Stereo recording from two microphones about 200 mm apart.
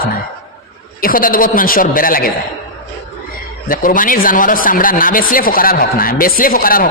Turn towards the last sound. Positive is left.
turn(degrees=45)  # may be behind; listen again after turning